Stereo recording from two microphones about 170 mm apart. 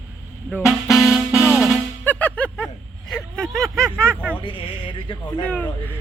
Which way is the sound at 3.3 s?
5° left (ahead or behind).